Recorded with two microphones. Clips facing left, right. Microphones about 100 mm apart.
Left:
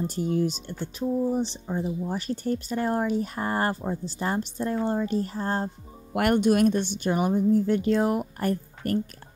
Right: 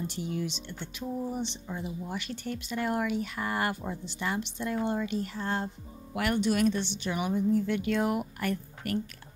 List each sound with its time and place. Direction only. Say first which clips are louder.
0.0 s speech: left 8 dB; 40° left (ahead or behind)
6.1 s a woman's voice: left 6 dB; 50° left (ahead or behind)